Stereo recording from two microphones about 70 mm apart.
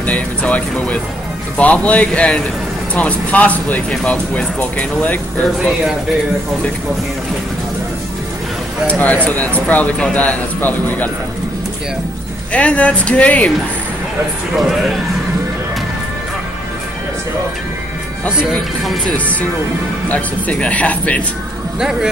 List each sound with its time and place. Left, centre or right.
0.0 s speech: left
5.4 s speech: centre
8.8 s speech: left
12.5 s speech: left
20.1 s speech: left